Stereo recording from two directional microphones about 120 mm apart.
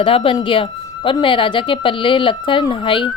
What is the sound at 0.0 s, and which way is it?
Speech, 50° left (ahead or behind).